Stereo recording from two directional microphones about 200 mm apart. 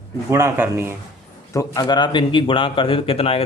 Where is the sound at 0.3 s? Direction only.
15° right (ahead or behind).